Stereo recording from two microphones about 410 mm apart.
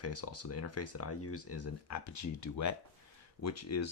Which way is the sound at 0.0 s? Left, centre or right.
Left.